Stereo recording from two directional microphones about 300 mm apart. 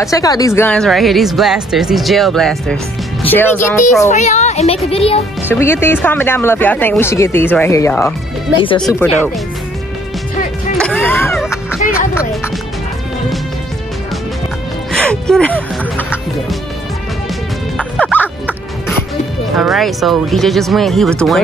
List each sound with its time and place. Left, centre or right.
0.0 s a woman's voice: centre
4.1 s speech: left
5.5 s speech: centre
8.8 s a woman's voice: centre
10.8 s music: centre
14.9 s music: centre
17.7 s music: centre
19.5 s a woman's voice: centre